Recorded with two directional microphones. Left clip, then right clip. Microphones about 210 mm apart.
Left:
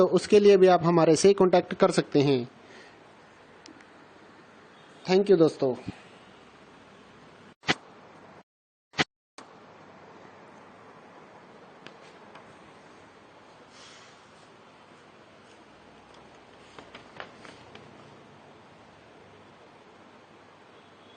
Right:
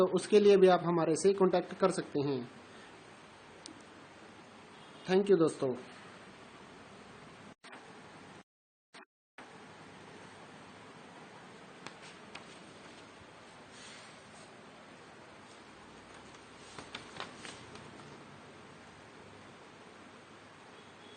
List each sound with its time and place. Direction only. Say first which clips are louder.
0.0 s a man's voice: left 7 dB; 30° left (ahead or behind)
5.0 s a man's voice: left 7 dB; 30° left (ahead or behind)